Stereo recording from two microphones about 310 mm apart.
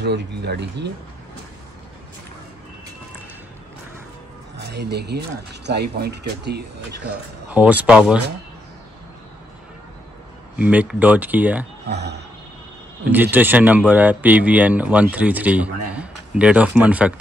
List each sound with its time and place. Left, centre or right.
0.0 s speech: right
4.6 s speech: right
7.0 s speech: centre
10.6 s speech: centre
11.9 s speech: right
13.0 s speech: centre